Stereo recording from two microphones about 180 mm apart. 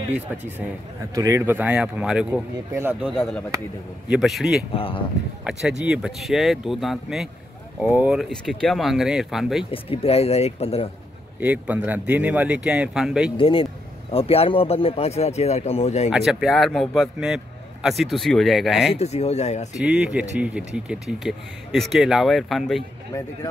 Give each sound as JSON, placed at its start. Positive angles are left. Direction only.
{"t": 1.1, "sound": "speech", "side_deg": -15}
{"t": 3.2, "sound": "speech", "side_deg": 0}
{"t": 4.7, "sound": "speech", "side_deg": 30}
{"t": 5.4, "sound": "speech", "side_deg": -5}
{"t": 9.7, "sound": "speech", "side_deg": 30}
{"t": 11.3, "sound": "speech", "side_deg": -10}
{"t": 13.4, "sound": "speech", "side_deg": 30}
{"t": 16.1, "sound": "speech", "side_deg": -5}
{"t": 18.9, "sound": "speech", "side_deg": 35}
{"t": 19.8, "sound": "speech", "side_deg": -5}